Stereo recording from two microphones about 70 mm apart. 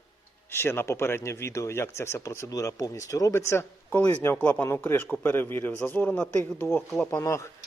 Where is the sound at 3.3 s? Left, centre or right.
Left.